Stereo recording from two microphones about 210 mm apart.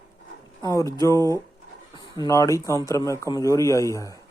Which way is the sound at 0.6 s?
15° left (ahead or behind).